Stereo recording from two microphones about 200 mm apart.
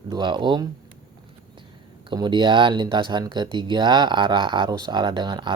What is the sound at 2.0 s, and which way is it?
Speech, 20° right (ahead or behind).